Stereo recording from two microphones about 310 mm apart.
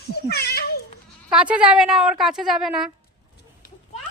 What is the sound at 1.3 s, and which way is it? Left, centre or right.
A woman's voice, centre.